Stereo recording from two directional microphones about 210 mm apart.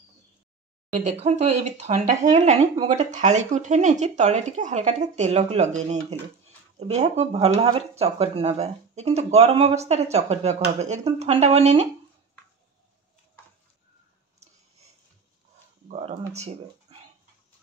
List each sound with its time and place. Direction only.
0.9 s speech: 30° right (ahead or behind)
16.3 s speech: 30° right (ahead or behind)